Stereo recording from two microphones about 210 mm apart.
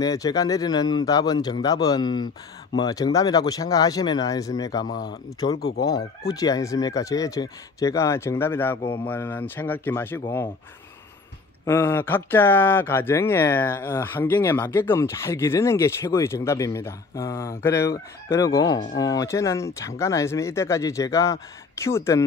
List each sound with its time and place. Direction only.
0.0 s a man's voice: 15° left (ahead or behind)
5.6 s speech: 50° left (ahead or behind)
5.9 s a man's voice: 15° left (ahead or behind)
11.6 s a man's voice: 10° left (ahead or behind)